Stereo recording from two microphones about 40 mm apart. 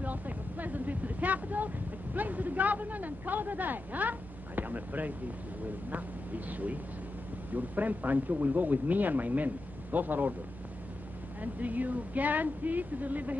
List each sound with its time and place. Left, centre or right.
0.0 s vehicle: right
2.1 s speech: right
11.4 s speech: right